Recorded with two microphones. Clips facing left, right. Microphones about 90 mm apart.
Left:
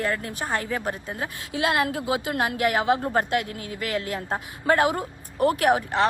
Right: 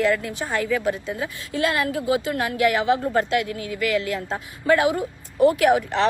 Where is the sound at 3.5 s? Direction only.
35° left (ahead or behind).